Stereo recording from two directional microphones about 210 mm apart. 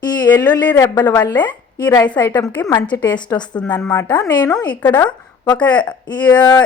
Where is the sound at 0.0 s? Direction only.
20° left (ahead or behind).